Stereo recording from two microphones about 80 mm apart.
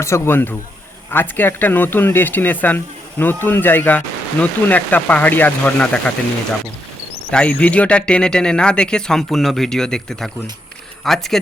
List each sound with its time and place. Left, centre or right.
0.0 s speech: left
7.3 s speech: centre